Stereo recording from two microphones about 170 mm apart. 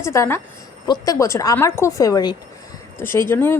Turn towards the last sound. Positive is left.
turn(degrees=15)  # may be behind; listen again after turning